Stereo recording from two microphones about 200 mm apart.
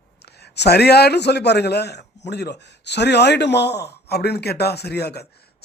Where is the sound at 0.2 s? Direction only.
55° left (ahead or behind).